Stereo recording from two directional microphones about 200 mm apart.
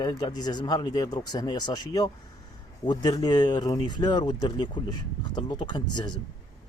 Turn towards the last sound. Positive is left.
turn(degrees=20)  # may be behind; listen again after turning